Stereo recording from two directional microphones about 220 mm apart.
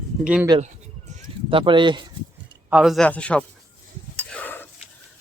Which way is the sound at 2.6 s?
5° right (ahead or behind).